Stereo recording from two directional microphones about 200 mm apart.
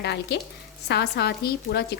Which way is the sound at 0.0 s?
55° left (ahead or behind).